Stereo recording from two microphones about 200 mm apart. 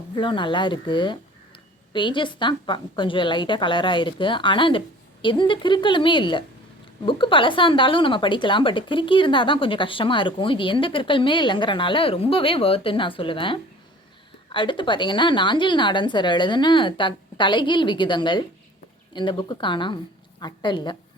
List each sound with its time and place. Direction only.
0.2 s a woman's voice: 25° left (ahead or behind)